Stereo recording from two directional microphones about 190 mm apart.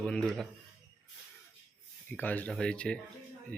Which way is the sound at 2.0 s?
10° left (ahead or behind).